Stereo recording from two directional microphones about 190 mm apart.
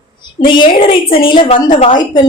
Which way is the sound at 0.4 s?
25° left (ahead or behind).